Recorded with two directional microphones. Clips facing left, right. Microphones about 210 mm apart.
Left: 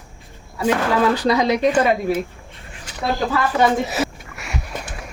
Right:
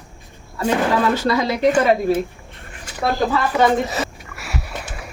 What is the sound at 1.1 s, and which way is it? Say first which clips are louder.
Speech: left 2 dB; 15° left (ahead or behind).